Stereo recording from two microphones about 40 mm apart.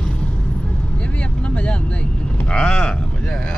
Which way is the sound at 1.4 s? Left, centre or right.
Left.